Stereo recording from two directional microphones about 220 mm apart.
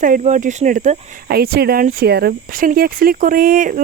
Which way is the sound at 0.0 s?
35° right (ahead or behind).